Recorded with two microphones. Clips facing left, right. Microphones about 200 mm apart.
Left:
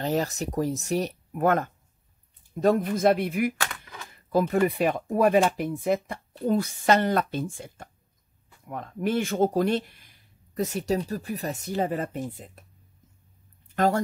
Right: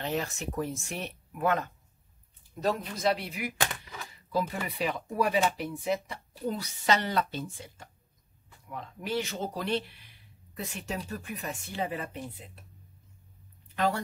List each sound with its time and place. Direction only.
0.0 s speech: 40° left (ahead or behind)
13.7 s speech: 45° left (ahead or behind)